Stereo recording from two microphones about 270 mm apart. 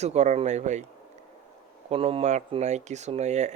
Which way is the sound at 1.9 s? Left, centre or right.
Right.